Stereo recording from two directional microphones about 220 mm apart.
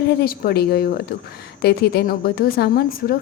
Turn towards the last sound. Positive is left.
turn(degrees=45)  # may be behind; listen again after turning